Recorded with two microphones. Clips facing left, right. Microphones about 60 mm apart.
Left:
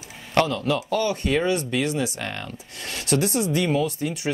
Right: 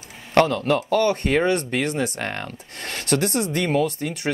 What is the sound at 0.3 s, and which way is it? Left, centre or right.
Speech, right.